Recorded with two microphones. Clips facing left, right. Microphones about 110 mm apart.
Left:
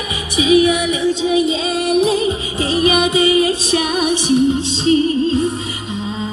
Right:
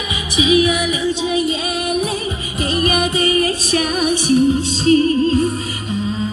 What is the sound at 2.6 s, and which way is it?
Music, 20° left (ahead or behind).